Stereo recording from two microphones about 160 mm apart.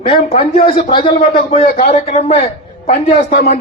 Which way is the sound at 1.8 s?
40° left (ahead or behind).